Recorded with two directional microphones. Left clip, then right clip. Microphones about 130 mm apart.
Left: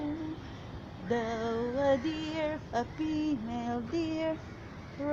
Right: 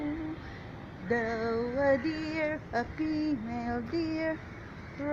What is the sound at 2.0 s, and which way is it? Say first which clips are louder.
Female singing: right 1 dB; 60° left (ahead or behind).